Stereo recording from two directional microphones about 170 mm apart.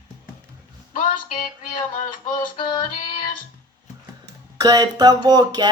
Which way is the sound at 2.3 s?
25° left (ahead or behind).